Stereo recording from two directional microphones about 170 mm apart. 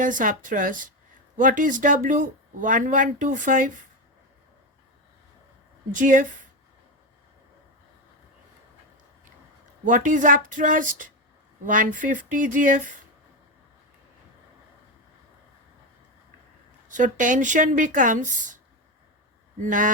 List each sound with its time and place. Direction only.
0.0 s speech: 50° right (ahead or behind)
5.9 s speech: 50° right (ahead or behind)
9.8 s speech: 50° right (ahead or behind)
16.9 s speech: 50° right (ahead or behind)
19.6 s speech: 50° right (ahead or behind)